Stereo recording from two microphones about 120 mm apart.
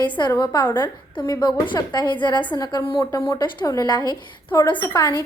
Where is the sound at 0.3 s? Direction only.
30° left (ahead or behind).